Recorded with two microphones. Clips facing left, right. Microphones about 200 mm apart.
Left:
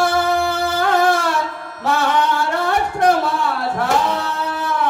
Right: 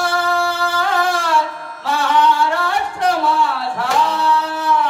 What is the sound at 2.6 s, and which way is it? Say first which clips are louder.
Music: left 3 dB; 45° left (ahead or behind).